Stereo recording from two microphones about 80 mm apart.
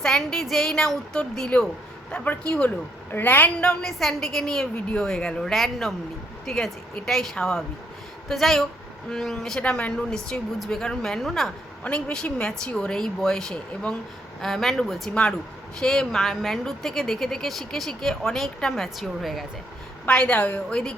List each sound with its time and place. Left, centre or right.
0.0 s a woman's voice: centre
2.1 s speech: centre
3.6 s a woman's voice: centre
11.8 s a woman's voice: centre
20.1 s a woman's voice: centre